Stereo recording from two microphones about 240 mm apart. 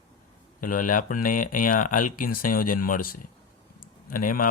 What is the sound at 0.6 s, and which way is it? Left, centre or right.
Speech, left.